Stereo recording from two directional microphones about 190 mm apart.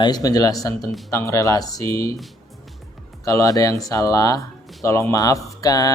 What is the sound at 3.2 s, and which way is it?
Speech, 15° left (ahead or behind).